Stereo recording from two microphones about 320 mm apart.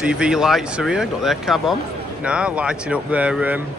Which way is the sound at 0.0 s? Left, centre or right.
Centre.